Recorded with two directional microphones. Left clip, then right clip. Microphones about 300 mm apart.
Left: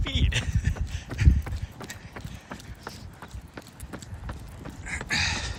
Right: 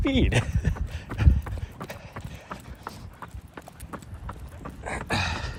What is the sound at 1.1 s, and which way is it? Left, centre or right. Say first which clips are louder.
Clip-clop: even; centre.